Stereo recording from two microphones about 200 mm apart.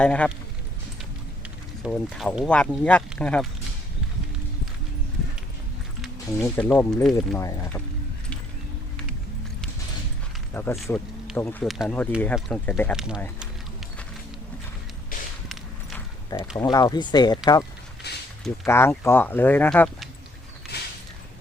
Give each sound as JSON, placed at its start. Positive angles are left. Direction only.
{"t": 0.0, "sound": "speech", "side_deg": 5}
{"t": 1.8, "sound": "speech", "side_deg": 0}
{"t": 6.3, "sound": "speech", "side_deg": 10}
{"t": 7.3, "sound": "speech", "side_deg": 15}
{"t": 10.5, "sound": "speech", "side_deg": 10}
{"t": 13.0, "sound": "speech", "side_deg": -5}
{"t": 15.1, "sound": "a sound", "side_deg": 45}
{"t": 16.3, "sound": "speech", "side_deg": 15}
{"t": 18.0, "sound": "a sound", "side_deg": 55}
{"t": 18.6, "sound": "speech", "side_deg": 10}